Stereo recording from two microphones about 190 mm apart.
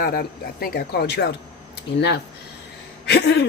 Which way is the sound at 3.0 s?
60° left (ahead or behind).